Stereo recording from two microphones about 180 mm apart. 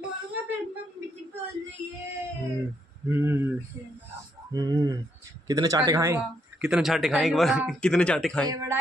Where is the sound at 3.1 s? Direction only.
15° right (ahead or behind).